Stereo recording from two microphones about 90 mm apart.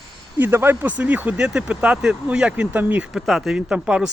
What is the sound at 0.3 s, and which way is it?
Speech, 25° right (ahead or behind).